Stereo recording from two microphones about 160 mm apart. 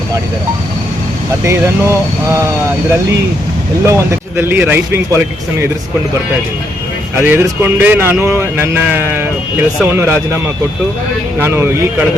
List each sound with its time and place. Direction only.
1.5 s speech: 20° right (ahead or behind)
3.8 s speech: 15° right (ahead or behind)
7.2 s speech: 15° right (ahead or behind)